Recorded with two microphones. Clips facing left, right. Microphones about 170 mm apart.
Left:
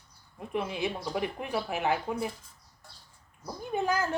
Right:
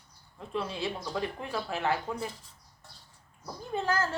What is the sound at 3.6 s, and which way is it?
Speech, 15° left (ahead or behind).